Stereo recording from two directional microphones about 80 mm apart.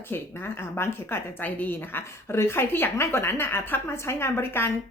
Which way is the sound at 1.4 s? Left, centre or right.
Left.